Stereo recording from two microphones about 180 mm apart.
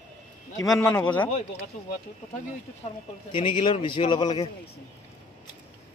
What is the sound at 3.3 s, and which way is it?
Speech, 30° left (ahead or behind).